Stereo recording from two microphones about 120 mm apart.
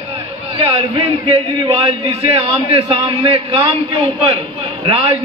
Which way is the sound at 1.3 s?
50° right (ahead or behind).